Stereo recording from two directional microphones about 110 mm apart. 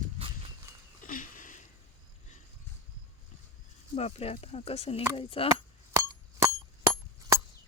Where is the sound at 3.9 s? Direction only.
70° left (ahead or behind).